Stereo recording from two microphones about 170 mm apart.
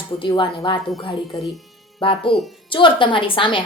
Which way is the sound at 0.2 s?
30° left (ahead or behind).